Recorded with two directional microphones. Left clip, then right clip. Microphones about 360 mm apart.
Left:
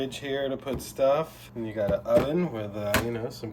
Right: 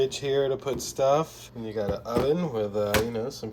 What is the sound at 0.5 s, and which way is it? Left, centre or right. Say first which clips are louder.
Speech: right 3 dB; centre.